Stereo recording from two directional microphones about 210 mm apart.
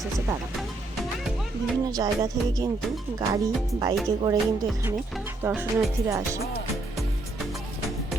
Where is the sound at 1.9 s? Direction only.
20° right (ahead or behind).